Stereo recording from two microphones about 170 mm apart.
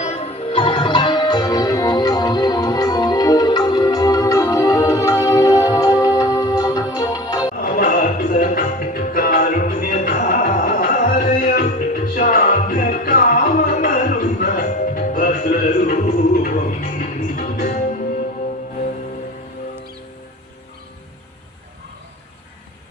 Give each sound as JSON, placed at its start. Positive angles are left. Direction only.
{"t": 0.0, "sound": "music", "side_deg": 40}
{"t": 7.6, "sound": "music", "side_deg": 55}